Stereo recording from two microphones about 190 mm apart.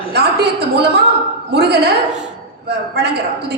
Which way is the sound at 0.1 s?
60° right (ahead or behind).